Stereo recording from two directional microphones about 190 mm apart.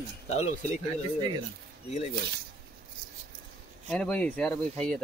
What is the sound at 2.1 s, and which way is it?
Speech, 60° right (ahead or behind).